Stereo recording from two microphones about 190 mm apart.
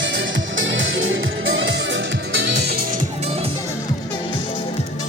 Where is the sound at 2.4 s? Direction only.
55° right (ahead or behind).